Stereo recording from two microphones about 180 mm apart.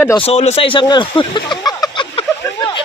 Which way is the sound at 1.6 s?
20° left (ahead or behind).